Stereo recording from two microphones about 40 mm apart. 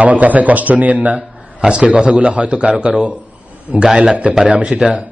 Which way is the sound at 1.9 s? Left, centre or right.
Right.